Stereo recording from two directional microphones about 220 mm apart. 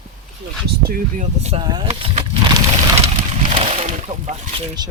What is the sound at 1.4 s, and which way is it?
Speech, 30° right (ahead or behind).